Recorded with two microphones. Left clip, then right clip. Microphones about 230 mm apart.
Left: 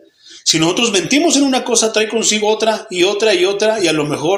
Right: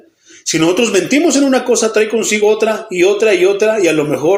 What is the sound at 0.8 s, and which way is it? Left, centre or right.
Speech, left.